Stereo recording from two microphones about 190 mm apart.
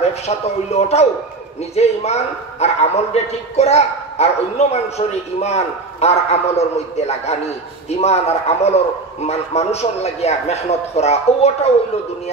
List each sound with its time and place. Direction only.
0.0 s a man's voice: 35° left (ahead or behind)